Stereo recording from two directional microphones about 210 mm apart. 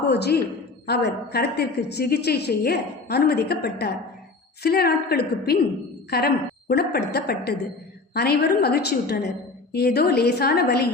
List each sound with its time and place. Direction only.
0.1 s a woman's voice: 50° left (ahead or behind)